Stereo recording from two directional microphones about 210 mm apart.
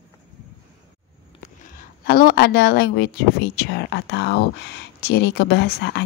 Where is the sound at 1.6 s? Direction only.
40° left (ahead or behind).